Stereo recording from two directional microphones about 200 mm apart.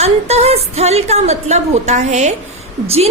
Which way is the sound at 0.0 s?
35° right (ahead or behind).